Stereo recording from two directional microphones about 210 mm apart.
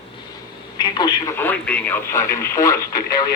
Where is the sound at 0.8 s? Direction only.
20° left (ahead or behind).